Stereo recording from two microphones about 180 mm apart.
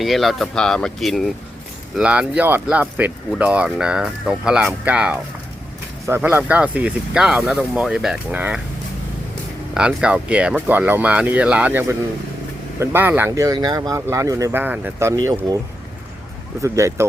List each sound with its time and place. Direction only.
0.0 s speech: centre (ahead or behind)
9.7 s speech: 5° right (ahead or behind)
16.6 s speech: 15° right (ahead or behind)